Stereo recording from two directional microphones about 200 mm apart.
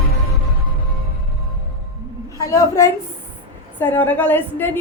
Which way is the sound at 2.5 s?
15° left (ahead or behind).